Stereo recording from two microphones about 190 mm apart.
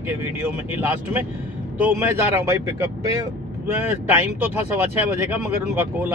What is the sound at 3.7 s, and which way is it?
Speech, 10° right (ahead or behind).